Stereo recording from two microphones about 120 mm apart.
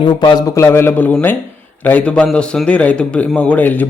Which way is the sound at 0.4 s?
25° left (ahead or behind).